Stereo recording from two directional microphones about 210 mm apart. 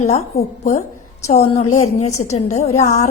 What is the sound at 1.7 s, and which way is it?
Speech, 90° left.